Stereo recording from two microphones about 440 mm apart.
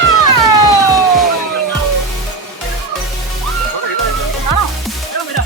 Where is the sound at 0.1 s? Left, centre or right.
Left.